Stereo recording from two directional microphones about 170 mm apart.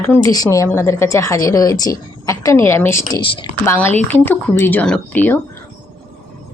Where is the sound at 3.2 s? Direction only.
30° left (ahead or behind).